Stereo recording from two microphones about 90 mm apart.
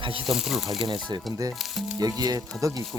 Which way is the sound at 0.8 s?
60° right (ahead or behind).